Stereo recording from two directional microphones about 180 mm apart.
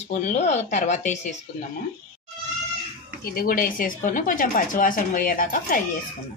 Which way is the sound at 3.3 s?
50° left (ahead or behind).